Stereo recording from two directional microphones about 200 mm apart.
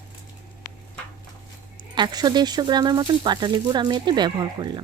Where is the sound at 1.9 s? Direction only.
20° right (ahead or behind).